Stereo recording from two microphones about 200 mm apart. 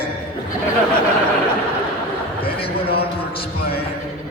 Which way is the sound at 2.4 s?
30° left (ahead or behind).